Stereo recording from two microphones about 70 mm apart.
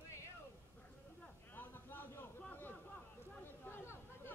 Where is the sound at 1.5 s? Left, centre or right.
Left.